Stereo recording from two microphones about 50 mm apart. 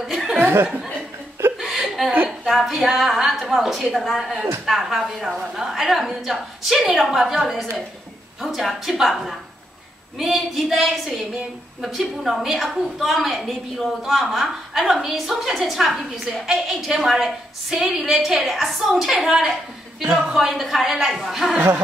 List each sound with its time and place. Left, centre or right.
0.1 s chuckle: centre
1.6 s chuckle: centre
2.2 s a woman's voice: centre
21.5 s speech: right